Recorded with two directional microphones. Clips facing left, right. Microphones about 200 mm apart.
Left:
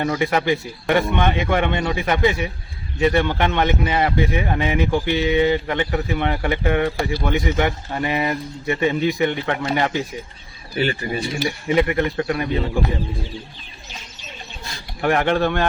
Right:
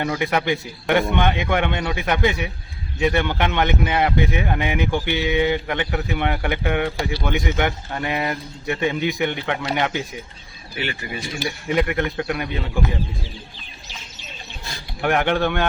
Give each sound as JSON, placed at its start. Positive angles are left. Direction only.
{"t": 0.0, "sound": "speech", "side_deg": 0}
{"t": 10.8, "sound": "speech", "side_deg": 35}
{"t": 11.7, "sound": "speech", "side_deg": 0}
{"t": 15.0, "sound": "speech", "side_deg": 0}